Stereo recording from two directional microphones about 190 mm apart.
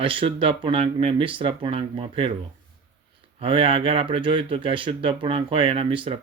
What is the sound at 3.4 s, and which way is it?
Speech, 30° right (ahead or behind).